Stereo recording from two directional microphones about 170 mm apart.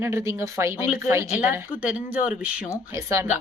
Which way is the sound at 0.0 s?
15° right (ahead or behind).